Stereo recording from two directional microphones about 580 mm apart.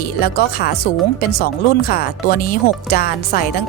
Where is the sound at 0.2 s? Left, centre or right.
Centre.